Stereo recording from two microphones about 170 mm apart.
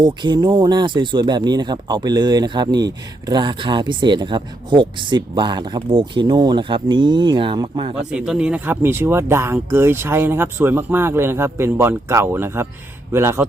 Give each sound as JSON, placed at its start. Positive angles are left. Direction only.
{"t": 0.0, "sound": "speech", "side_deg": -25}
{"t": 8.1, "sound": "speech", "side_deg": -5}